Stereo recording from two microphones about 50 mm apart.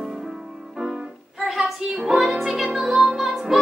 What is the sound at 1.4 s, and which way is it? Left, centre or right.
Music, centre.